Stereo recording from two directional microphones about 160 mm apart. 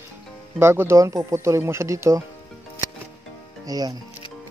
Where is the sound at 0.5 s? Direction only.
15° right (ahead or behind).